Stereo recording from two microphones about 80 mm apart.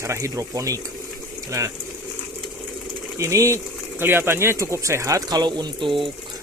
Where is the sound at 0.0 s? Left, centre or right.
Right.